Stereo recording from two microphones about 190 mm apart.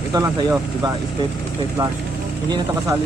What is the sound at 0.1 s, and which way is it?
Speech, 20° right (ahead or behind).